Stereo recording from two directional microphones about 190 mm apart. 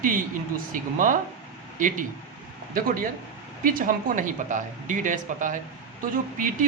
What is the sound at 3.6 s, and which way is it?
Speech, 45° right (ahead or behind).